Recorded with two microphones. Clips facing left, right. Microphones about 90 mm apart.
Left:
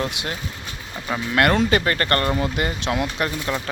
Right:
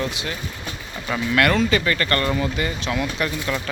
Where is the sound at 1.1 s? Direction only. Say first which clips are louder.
Right 1 dB; 20° left (ahead or behind).